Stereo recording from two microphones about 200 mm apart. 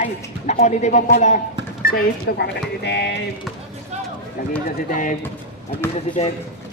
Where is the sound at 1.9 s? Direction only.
50° left (ahead or behind).